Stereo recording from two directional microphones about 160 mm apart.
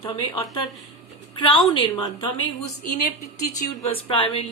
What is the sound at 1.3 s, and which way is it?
Speech, 35° left (ahead or behind).